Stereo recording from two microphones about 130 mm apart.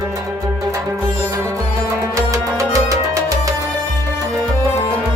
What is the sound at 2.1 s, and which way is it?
Music, 25° right (ahead or behind).